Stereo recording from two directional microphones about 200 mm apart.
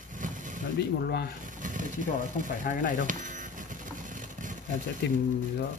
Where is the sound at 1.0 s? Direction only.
50° left (ahead or behind).